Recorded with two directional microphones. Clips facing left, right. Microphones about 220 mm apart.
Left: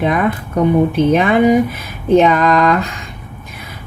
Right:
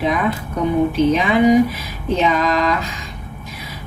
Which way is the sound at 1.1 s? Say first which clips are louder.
Left 2 dB; 55° left (ahead or behind).